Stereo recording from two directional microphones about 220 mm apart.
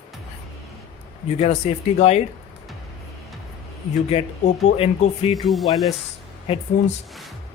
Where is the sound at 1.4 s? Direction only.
30° left (ahead or behind).